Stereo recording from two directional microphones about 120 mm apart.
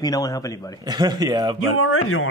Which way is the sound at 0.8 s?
35° right (ahead or behind).